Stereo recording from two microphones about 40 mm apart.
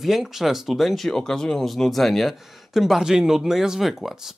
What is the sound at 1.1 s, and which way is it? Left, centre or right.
Speech, centre.